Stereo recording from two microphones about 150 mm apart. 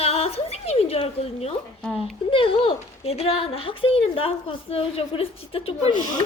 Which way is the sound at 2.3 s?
35° left (ahead or behind).